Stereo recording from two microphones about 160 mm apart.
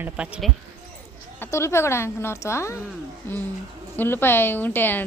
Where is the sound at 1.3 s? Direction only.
15° left (ahead or behind).